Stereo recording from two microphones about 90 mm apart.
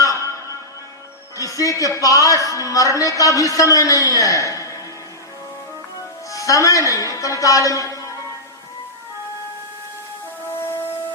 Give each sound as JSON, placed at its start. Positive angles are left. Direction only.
{"t": 0.0, "sound": "music", "side_deg": 35}
{"t": 1.4, "sound": "a woman's voice", "side_deg": 40}
{"t": 6.3, "sound": "a woman's voice", "side_deg": 40}